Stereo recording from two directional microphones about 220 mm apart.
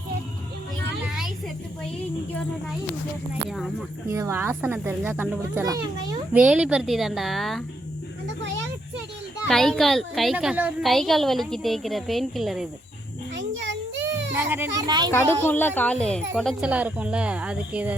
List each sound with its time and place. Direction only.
4.1 s a child's voice: 10° right (ahead or behind)
6.4 s a woman's voice: 5° right (ahead or behind)
9.5 s a woman's voice: centre (ahead or behind)
13.3 s a sound: 55° right (ahead or behind)
14.3 s a child's voice: 10° right (ahead or behind)
15.1 s a child's voice: 10° left (ahead or behind); by 17.9 s 5° right (ahead or behind)